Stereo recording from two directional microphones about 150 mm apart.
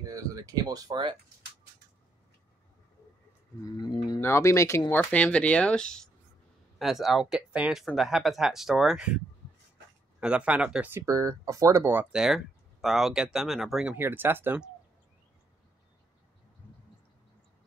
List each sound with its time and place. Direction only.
0.0 s speech: 25° right (ahead or behind)
3.6 s speech: 25° left (ahead or behind); by 9.2 s 5° right (ahead or behind)
10.2 s speech: 10° right (ahead or behind)
13.9 s speech: 15° right (ahead or behind)